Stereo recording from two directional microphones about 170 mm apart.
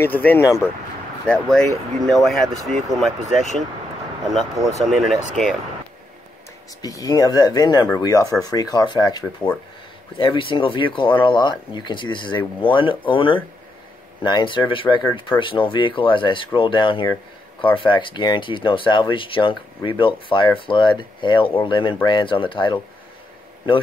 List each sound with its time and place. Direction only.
0.0 s speech: 10° left (ahead or behind)
1.2 s speech: 5° left (ahead or behind)
6.8 s speech: 20° left (ahead or behind)